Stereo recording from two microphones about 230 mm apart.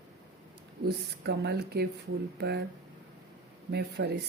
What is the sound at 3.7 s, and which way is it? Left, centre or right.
Speech, right.